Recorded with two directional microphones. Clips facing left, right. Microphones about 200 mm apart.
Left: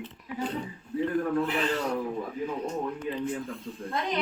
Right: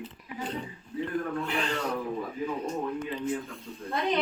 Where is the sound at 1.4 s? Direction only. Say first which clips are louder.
Left 3 dB; centre (ahead or behind).